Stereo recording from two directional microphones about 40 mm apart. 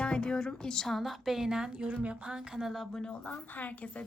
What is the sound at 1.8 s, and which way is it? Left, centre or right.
Speech, right.